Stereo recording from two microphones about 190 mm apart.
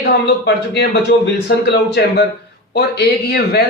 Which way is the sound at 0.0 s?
60° left (ahead or behind).